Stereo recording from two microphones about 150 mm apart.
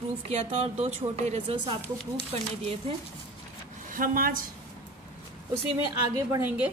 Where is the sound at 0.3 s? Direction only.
40° right (ahead or behind).